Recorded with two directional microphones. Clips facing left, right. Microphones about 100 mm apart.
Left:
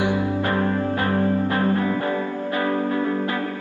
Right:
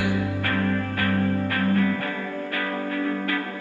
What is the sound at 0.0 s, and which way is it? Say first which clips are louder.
Music: left 4 dB; 25° left (ahead or behind).